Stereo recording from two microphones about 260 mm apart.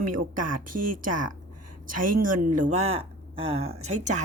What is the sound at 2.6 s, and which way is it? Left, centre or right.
Speech, right.